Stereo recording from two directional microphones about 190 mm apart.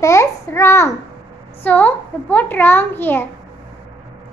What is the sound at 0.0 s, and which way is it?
Child singing, 15° left (ahead or behind).